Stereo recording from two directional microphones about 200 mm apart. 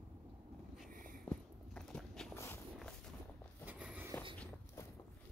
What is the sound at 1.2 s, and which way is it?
Walk, 5° left (ahead or behind).